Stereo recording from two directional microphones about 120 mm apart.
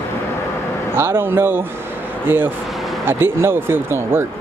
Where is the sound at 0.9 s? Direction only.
20° right (ahead or behind).